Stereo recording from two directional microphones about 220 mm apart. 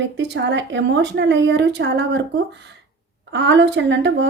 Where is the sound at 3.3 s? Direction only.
55° right (ahead or behind).